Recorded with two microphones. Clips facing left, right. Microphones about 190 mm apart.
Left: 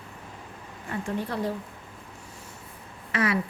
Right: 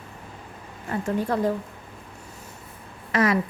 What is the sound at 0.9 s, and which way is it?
Speech, 45° right (ahead or behind).